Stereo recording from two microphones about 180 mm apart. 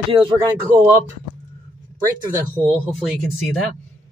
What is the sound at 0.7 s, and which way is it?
Female singing, 15° right (ahead or behind).